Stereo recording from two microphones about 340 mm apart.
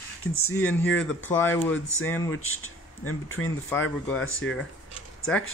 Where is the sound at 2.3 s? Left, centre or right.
Left.